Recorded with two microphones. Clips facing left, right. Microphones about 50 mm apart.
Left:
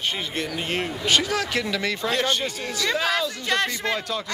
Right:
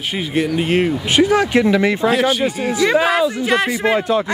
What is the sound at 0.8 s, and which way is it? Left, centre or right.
Speech, right.